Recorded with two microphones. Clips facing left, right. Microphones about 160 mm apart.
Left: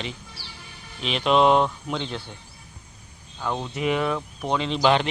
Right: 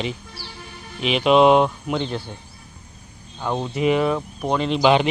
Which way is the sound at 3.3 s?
15° right (ahead or behind).